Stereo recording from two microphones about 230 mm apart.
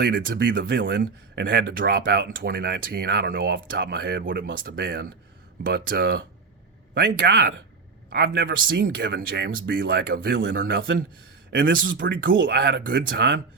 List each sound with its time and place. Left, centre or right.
0.0 s a man's voice: right
11.9 s speech: right